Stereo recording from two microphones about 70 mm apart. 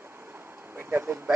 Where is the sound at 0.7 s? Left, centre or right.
Right.